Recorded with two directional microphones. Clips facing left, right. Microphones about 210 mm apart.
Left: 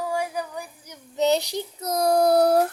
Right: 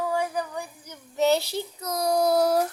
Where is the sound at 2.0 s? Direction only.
55° left (ahead or behind).